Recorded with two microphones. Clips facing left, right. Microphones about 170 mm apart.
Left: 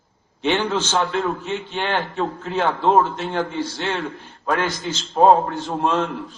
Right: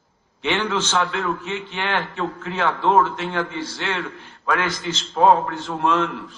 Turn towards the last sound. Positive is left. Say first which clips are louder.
# even
turn(degrees=35)  # may be behind; listen again after turning